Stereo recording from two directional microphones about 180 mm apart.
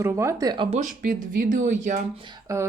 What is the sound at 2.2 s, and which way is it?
Speech, 20° right (ahead or behind).